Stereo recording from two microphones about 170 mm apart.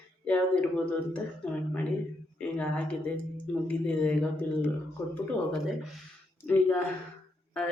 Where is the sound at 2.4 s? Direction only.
5° left (ahead or behind).